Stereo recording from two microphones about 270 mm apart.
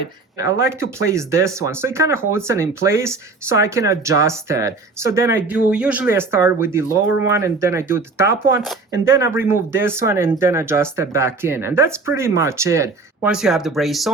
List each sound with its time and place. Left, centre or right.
0.6 s speech: centre